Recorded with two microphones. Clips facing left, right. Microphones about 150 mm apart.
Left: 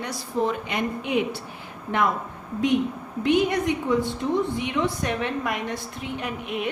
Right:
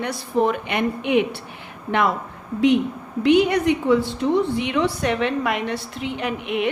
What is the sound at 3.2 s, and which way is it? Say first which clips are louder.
A woman's voice: right 5 dB; 80° right.